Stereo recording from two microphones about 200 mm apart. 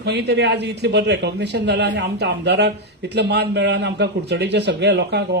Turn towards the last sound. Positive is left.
turn(degrees=-55)  # may be behind; listen again after turning